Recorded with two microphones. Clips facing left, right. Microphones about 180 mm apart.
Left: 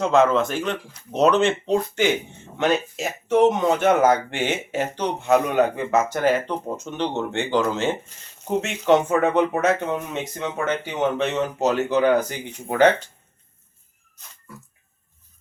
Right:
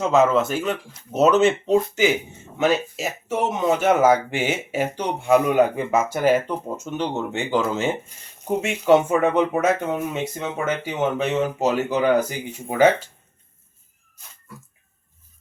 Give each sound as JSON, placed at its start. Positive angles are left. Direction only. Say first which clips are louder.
{"t": 0.0, "sound": "speech", "louder": "even", "side_deg": -5}